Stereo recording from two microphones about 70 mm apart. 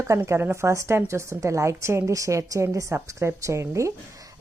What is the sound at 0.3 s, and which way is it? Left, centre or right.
A woman's voice, right.